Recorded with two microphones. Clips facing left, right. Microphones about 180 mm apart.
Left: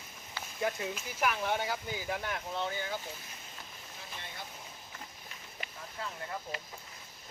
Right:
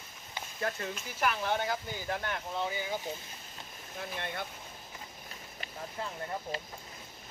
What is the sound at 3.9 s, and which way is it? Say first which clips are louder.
Speech: right 9 dB; 60° right (ahead or behind).